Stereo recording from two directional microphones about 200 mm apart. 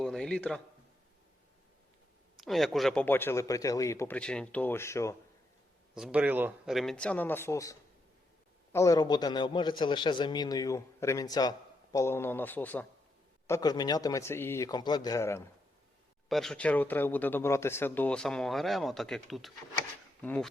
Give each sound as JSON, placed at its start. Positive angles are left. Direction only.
{"t": 0.0, "sound": "a man's voice", "side_deg": 5}
{"t": 2.4, "sound": "a man's voice", "side_deg": 0}
{"t": 5.9, "sound": "a man's voice", "side_deg": -5}
{"t": 13.5, "sound": "a man's voice", "side_deg": 20}
{"t": 16.3, "sound": "a man's voice", "side_deg": 0}